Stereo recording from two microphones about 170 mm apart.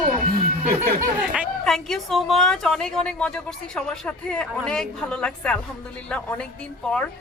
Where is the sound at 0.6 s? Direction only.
50° right (ahead or behind).